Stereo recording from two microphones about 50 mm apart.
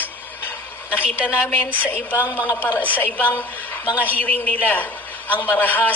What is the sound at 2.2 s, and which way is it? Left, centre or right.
Speech, left.